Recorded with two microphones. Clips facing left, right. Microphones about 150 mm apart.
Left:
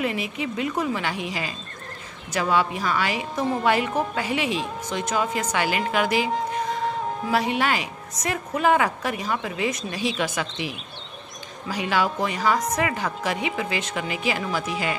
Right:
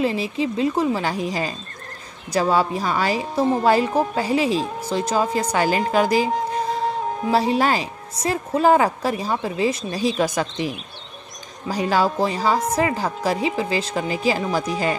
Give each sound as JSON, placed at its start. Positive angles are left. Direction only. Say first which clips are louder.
{"t": 0.0, "sound": "a woman's voice", "louder": "right 5 dB", "side_deg": -30}